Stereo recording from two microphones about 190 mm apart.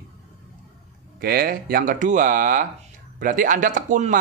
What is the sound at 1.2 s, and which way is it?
A man's voice, 50° right (ahead or behind).